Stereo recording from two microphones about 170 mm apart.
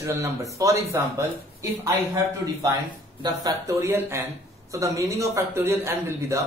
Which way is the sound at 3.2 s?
25° right (ahead or behind).